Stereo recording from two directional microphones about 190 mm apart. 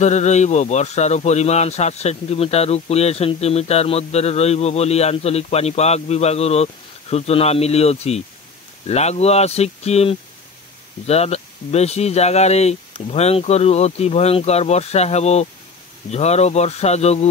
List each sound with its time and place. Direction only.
0.0 s speech: 35° left (ahead or behind)